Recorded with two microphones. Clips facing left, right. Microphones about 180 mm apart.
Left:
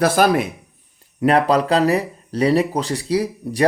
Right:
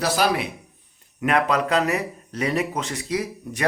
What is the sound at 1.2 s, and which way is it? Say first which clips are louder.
Speech: left 5 dB; 35° left (ahead or behind).